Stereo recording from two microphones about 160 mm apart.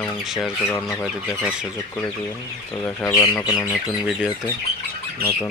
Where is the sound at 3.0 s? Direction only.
20° left (ahead or behind).